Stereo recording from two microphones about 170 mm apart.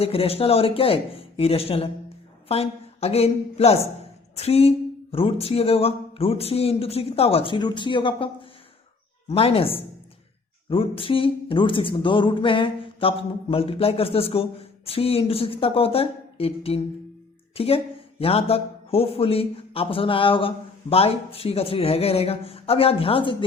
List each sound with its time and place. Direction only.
0.0 s speech: 35° left (ahead or behind)